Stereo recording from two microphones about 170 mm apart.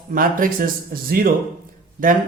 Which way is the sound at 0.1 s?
55° right (ahead or behind).